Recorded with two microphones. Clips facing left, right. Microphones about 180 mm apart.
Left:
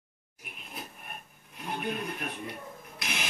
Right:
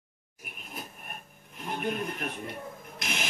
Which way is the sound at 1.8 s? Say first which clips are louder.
Right 3 dB; 50° right (ahead or behind).